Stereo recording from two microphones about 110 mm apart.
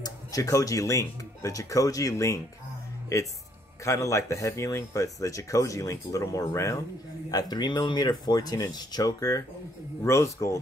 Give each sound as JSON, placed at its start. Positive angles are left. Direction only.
{"t": 0.0, "sound": "speech", "side_deg": 30}
{"t": 3.8, "sound": "speech", "side_deg": 30}